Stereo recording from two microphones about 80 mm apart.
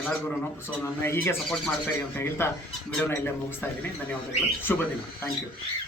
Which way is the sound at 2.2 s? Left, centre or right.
Left.